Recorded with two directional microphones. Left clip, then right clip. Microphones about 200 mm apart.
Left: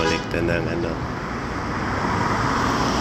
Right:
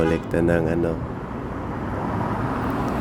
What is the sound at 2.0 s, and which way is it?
Vehicle, 45° right (ahead or behind).